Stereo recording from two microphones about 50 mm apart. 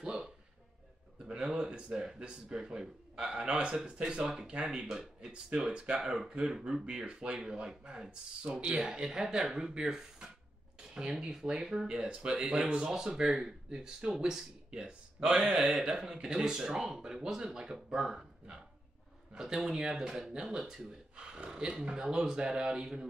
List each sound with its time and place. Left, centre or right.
0.0 s a sound: centre
1.2 s speech: centre
4.2 s speech: centre